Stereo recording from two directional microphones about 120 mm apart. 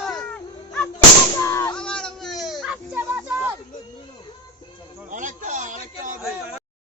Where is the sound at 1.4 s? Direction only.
20° left (ahead or behind).